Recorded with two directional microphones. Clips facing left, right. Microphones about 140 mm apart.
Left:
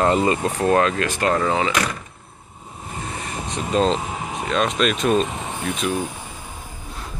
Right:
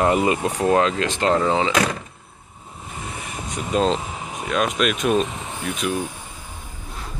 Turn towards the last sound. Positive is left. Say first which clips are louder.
# left 1 dB
turn(degrees=-5)  # may be behind; listen again after turning